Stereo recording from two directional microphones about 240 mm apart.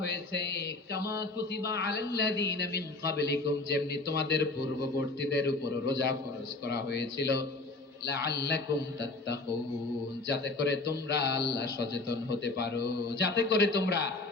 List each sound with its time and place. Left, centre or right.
0.0 s a man's voice: left